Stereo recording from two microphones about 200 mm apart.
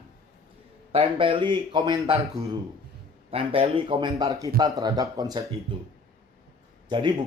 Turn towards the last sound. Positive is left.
turn(degrees=-25)  # may be behind; listen again after turning